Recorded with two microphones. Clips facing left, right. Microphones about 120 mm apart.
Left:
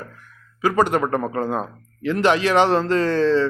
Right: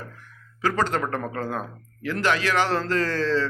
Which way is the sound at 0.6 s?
15° left (ahead or behind).